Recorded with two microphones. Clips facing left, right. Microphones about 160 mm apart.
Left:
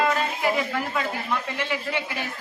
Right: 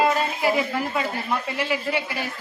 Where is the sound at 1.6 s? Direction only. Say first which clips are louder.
Right 3 dB; 10° right (ahead or behind).